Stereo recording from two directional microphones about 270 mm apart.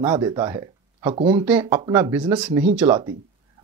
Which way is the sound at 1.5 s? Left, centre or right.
Centre.